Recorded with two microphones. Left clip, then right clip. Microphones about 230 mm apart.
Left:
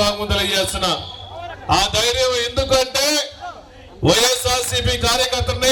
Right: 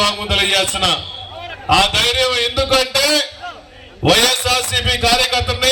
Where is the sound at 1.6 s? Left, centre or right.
Left.